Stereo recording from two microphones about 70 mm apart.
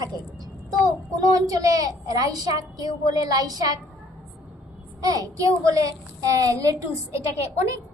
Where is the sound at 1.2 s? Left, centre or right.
Right.